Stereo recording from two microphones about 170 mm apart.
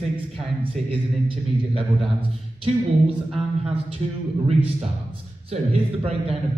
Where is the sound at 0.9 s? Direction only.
30° right (ahead or behind).